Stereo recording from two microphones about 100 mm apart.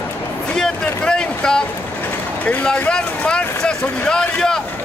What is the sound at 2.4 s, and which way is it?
Speech, 15° left (ahead or behind).